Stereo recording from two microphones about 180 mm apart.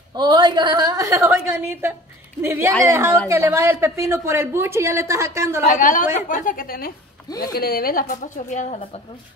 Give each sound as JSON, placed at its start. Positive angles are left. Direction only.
{"t": 0.1, "sound": "a woman's voice", "side_deg": -25}
{"t": 5.6, "sound": "a woman's voice", "side_deg": 50}